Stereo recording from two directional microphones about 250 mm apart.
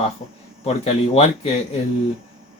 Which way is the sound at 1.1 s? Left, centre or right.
Left.